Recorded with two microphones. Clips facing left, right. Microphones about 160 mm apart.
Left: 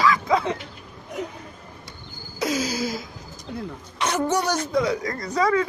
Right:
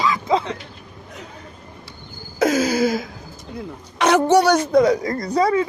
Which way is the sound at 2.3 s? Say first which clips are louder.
Right 7 dB; 55° right (ahead or behind).